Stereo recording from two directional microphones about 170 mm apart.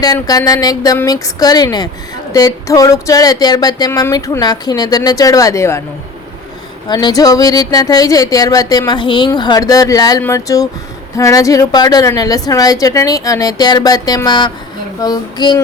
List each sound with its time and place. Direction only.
0.0 s speech: 20° left (ahead or behind)
6.8 s speech: 25° left (ahead or behind)